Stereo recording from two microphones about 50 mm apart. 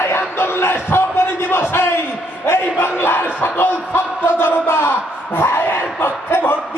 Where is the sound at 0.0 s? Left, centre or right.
Left.